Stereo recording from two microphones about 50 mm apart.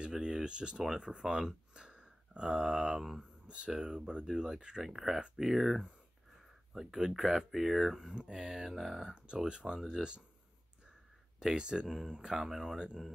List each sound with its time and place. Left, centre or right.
0.1 s speech: centre
3.0 s speech: centre
3.4 s speech: centre
4.8 s speech: centre
9.8 s speech: centre
11.3 s speech: centre